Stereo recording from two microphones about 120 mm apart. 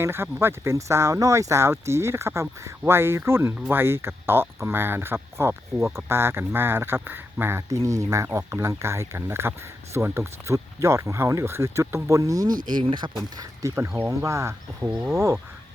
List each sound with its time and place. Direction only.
0.0 s speech: 20° right (ahead or behind); by 13.1 s 40° right (ahead or behind)
13.4 s speech: 25° right (ahead or behind)